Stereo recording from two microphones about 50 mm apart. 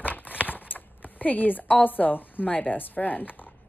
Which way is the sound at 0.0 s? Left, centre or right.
Left.